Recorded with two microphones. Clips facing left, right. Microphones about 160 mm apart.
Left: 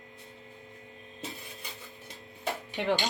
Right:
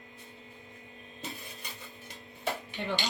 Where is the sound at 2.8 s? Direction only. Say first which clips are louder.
Left 10 dB; 90° left.